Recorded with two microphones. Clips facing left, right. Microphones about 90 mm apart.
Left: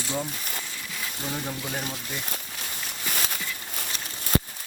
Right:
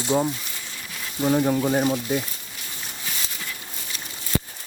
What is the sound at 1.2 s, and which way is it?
Speech, 60° right (ahead or behind).